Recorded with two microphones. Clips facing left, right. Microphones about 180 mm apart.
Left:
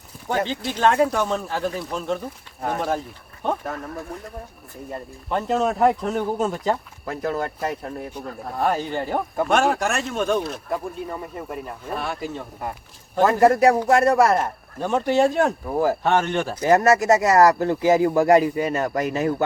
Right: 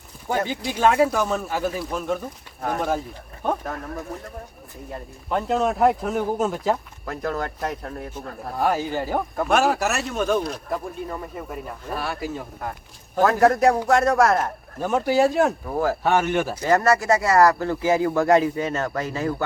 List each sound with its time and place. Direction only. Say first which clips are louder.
0.7 s speech: right 1 dB; 10° right (ahead or behind)
4.9 s speech: even; centre (ahead or behind)
16.0 s speech: even; 5° right (ahead or behind)
16.6 s speech: left 3 dB; 20° left (ahead or behind)